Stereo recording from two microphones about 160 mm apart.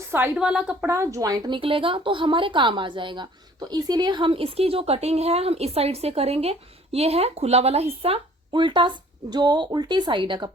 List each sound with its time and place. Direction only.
0.1 s a woman's voice: 15° right (ahead or behind); by 10.5 s 30° right (ahead or behind)